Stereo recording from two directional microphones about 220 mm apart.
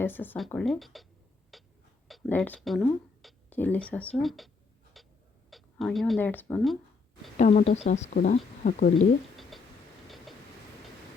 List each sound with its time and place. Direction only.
0.0 s speech: 10° left (ahead or behind)
1.5 s a sound: centre (ahead or behind)
2.0 s speech: centre (ahead or behind)
4.9 s a sound: centre (ahead or behind)
5.5 s speech: centre (ahead or behind)
7.3 s speech: 35° left (ahead or behind)